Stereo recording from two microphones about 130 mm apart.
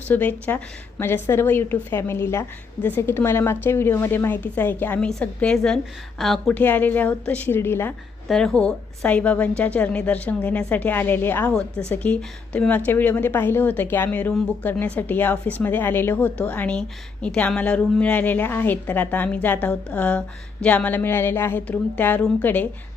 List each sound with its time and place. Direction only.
0.1 s a woman's voice: 15° left (ahead or behind)
6.6 s a woman's voice: 15° left (ahead or behind)
8.3 s a woman's voice: 5° left (ahead or behind)